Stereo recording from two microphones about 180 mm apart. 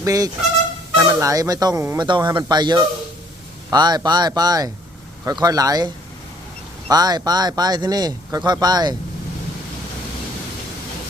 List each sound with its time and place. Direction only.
0.0 s speech: 20° right (ahead or behind)